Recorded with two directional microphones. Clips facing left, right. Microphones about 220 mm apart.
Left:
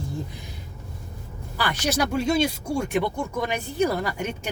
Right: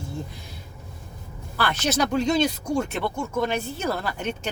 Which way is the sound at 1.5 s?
10° left (ahead or behind).